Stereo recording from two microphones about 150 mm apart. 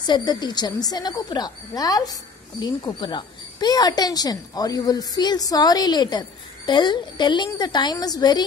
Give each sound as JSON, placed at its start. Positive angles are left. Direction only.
{"t": 0.0, "sound": "speech", "side_deg": 30}